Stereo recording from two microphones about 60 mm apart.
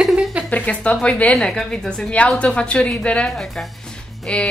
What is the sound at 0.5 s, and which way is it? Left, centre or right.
Speech, left.